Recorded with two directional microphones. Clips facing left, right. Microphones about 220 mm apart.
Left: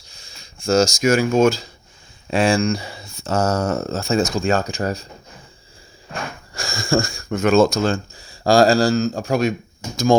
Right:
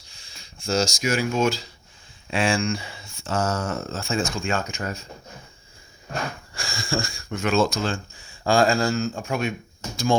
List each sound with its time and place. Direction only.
0.1 s speech: 45° left (ahead or behind)
6.5 s speech: 45° left (ahead or behind)